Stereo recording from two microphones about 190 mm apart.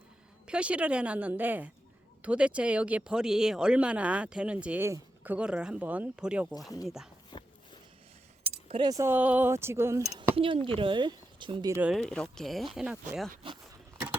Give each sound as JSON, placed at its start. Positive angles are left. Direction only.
{"t": 0.4, "sound": "speech", "side_deg": -5}
{"t": 7.3, "sound": "a sound", "side_deg": 20}
{"t": 8.4, "sound": "speech", "side_deg": -25}
{"t": 10.1, "sound": "speech", "side_deg": -25}
{"t": 11.8, "sound": "speech", "side_deg": 0}